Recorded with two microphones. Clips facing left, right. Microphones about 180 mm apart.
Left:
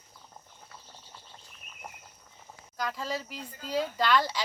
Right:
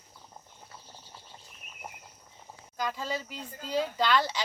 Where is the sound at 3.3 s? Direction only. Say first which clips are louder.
Even; 5° left (ahead or behind).